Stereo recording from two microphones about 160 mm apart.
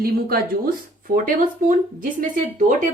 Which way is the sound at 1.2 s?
55° right (ahead or behind).